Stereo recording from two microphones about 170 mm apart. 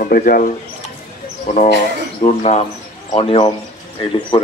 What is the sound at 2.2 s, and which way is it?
A man's voice, 40° left (ahead or behind).